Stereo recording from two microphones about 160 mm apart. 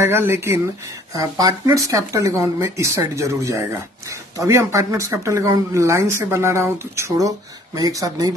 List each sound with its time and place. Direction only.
0.0 s speech: 15° right (ahead or behind)